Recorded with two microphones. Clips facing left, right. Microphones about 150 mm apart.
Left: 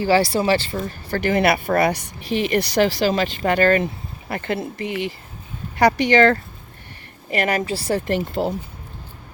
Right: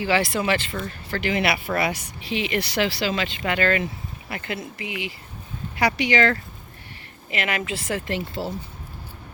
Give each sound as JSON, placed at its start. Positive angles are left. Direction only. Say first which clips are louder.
{"t": 0.0, "sound": "speech", "louder": "left 5 dB", "side_deg": 35}
{"t": 4.3, "sound": "speech", "louder": "left 7 dB", "side_deg": 55}